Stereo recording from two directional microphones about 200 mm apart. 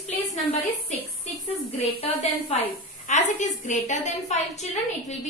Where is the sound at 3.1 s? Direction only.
35° left (ahead or behind).